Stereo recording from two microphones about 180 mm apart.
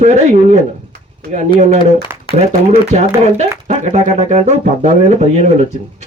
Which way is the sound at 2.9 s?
40° right (ahead or behind).